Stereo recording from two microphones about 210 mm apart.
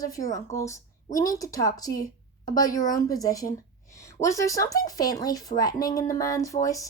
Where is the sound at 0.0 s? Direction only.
15° left (ahead or behind).